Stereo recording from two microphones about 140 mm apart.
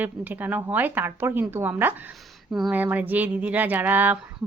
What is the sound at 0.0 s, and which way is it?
Speech, 10° right (ahead or behind).